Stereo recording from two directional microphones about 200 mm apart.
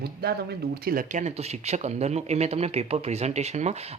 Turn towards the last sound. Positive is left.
turn(degrees=-35)  # may be behind; listen again after turning